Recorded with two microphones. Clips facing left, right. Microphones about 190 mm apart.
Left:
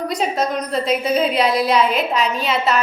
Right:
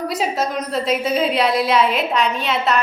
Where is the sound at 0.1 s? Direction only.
5° right (ahead or behind).